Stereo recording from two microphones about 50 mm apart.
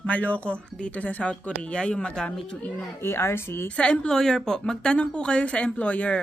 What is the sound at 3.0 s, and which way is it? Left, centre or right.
Speech, left.